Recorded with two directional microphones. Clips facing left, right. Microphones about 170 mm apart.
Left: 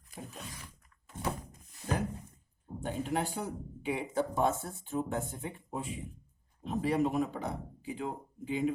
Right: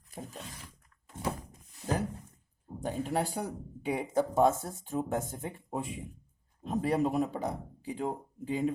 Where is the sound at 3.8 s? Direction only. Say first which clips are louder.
Right 3 dB; 45° right (ahead or behind).